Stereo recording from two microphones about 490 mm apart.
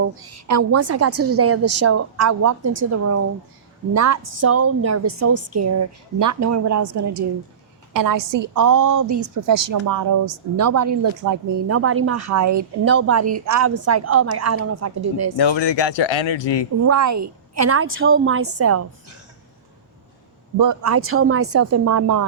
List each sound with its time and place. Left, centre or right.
0.0 s a woman's voice: right
11.7 s a woman's voice: right
15.4 s speech: left
16.8 s a woman's voice: right
20.6 s a woman's voice: right